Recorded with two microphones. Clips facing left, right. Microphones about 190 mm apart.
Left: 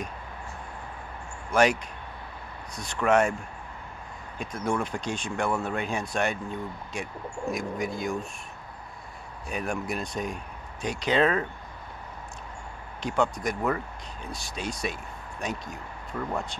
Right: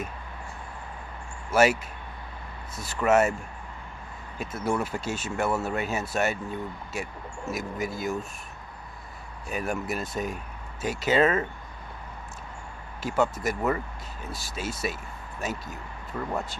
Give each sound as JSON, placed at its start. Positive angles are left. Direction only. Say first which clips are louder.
{"t": 1.5, "sound": "speech", "louder": "right 1 dB", "side_deg": -5}
{"t": 4.4, "sound": "speech", "louder": "right 1 dB", "side_deg": -5}
{"t": 9.5, "sound": "speech", "louder": "right 1 dB", "side_deg": 0}
{"t": 13.0, "sound": "speech", "louder": "right 1 dB", "side_deg": -5}